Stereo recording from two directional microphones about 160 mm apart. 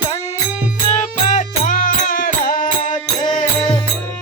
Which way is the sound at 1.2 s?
50° left (ahead or behind).